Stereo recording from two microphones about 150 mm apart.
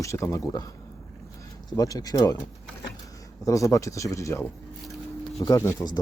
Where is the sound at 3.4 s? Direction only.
20° left (ahead or behind).